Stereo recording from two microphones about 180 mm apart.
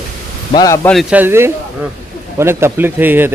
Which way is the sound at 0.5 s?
15° left (ahead or behind).